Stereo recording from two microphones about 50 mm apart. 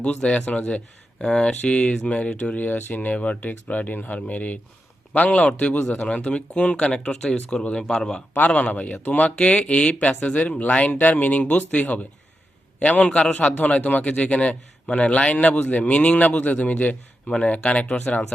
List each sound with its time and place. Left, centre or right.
0.0 s a man's voice: left
5.7 s speech: left
6.0 s a man's voice: left
9.4 s a man's voice: left
10.9 s a man's voice: left
13.1 s a man's voice: centre
13.6 s a man's voice: left